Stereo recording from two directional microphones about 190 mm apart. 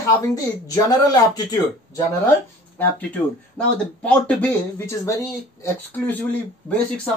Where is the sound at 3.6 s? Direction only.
5° left (ahead or behind).